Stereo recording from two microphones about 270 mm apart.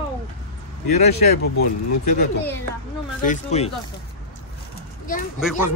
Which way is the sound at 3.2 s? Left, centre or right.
Left.